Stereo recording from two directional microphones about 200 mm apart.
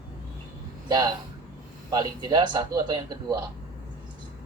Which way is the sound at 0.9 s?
20° right (ahead or behind).